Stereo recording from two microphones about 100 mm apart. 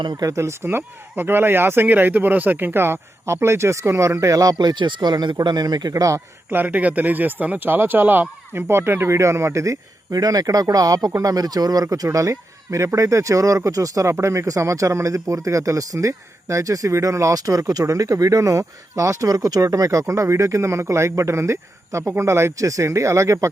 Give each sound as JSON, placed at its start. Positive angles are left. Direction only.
{"t": 0.0, "sound": "speech", "side_deg": -50}
{"t": 0.3, "sound": "speech", "side_deg": -30}
{"t": 4.5, "sound": "speech", "side_deg": -50}
{"t": 6.5, "sound": "speech", "side_deg": -20}